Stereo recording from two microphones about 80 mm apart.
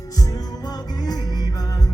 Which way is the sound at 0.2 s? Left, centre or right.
Left.